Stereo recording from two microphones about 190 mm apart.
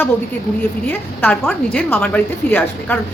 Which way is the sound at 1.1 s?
5° left (ahead or behind).